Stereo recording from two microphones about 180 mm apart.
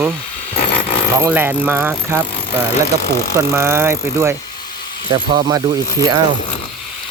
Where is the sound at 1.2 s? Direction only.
10° right (ahead or behind).